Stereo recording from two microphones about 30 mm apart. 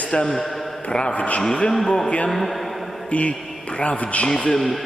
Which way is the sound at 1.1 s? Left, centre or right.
Left.